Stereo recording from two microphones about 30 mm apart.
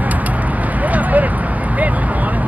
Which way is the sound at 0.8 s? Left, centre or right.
Right.